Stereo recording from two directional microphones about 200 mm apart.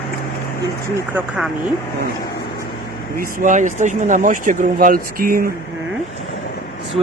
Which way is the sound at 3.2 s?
40° right (ahead or behind).